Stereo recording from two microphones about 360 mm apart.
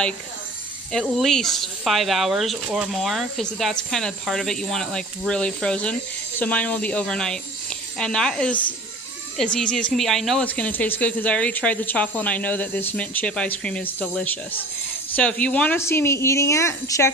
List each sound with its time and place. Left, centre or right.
0.9 s speech: centre